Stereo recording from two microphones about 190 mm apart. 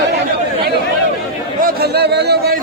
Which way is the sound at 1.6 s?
55° right (ahead or behind).